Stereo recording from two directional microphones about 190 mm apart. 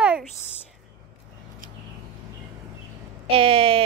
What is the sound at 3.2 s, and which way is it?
Speech, 30° right (ahead or behind).